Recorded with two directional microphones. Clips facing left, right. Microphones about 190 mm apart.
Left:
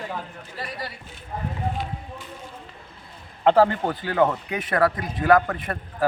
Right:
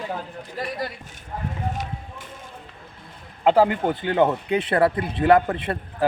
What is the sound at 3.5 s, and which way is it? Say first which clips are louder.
Speech: even; 10° right (ahead or behind).